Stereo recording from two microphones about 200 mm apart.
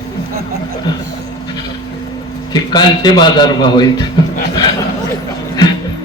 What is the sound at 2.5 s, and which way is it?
A man's voice, 20° left (ahead or behind).